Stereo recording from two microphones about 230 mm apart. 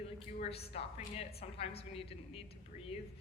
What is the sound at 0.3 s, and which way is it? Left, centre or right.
A woman's voice, left.